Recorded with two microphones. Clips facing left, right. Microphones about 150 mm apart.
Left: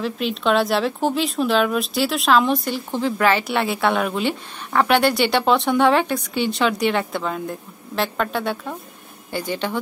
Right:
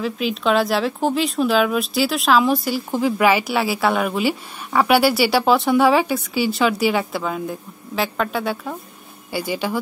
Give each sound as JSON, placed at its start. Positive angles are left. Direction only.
{"t": 0.0, "sound": "speech", "side_deg": 0}